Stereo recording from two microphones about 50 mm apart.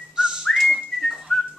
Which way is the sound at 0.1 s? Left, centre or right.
Centre.